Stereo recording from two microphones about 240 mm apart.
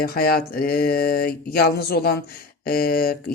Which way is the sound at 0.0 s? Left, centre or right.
Left.